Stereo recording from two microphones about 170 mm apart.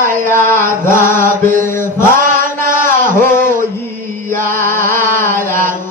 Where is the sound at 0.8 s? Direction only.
15° left (ahead or behind).